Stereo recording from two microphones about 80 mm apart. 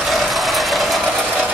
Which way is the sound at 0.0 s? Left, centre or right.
Centre.